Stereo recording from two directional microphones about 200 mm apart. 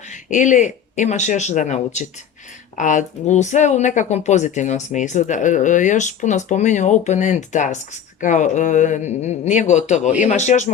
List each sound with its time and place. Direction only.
0.1 s speech: 40° left (ahead or behind)